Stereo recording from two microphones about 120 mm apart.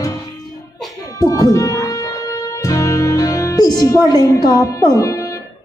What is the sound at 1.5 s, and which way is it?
Music, 25° left (ahead or behind).